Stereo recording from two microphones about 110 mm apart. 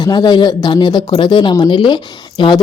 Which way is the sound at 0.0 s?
40° left (ahead or behind).